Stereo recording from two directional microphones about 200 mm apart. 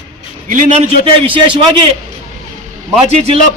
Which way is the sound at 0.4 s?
40° right (ahead or behind).